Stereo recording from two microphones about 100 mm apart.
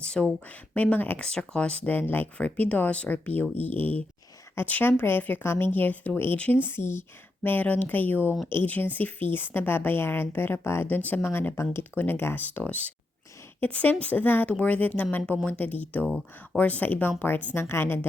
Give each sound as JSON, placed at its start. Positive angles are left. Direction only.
{"t": 0.0, "sound": "a woman's voice", "side_deg": 10}
{"t": 16.0, "sound": "speech", "side_deg": 0}
{"t": 16.6, "sound": "a woman's voice", "side_deg": 15}